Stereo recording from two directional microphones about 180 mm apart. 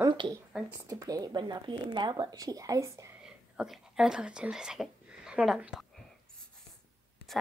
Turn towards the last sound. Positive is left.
turn(degrees=-5)  # may be behind; listen again after turning